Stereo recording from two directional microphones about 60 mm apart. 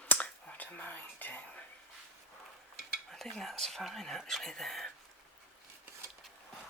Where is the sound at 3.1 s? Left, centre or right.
Centre.